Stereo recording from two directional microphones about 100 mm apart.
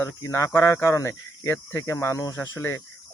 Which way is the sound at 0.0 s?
30° left (ahead or behind).